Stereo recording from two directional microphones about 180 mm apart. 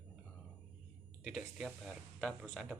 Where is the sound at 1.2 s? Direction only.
Centre (ahead or behind).